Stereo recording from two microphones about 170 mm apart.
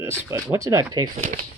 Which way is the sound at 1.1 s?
45° right (ahead or behind).